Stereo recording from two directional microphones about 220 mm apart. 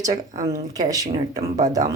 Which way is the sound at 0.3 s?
15° right (ahead or behind).